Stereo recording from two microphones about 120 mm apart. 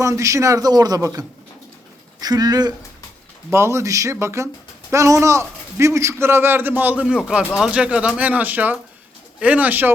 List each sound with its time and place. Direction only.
0.0 s a man's voice: 25° right (ahead or behind)
2.2 s speech: 35° right (ahead or behind)
3.5 s a man's voice: 20° right (ahead or behind)